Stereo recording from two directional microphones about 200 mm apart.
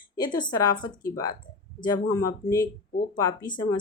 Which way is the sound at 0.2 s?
20° left (ahead or behind).